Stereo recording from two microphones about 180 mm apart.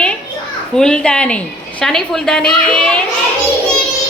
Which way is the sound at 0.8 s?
5° left (ahead or behind).